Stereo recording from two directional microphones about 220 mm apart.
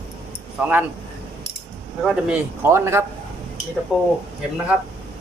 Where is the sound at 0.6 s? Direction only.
5° right (ahead or behind).